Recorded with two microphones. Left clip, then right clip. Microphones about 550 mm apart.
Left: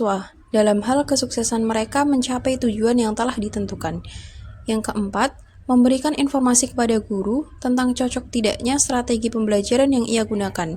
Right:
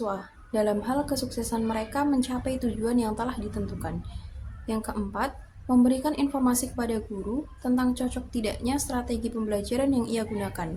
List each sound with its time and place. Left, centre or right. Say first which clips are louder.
0.0 s a woman's voice: left 9 dB; right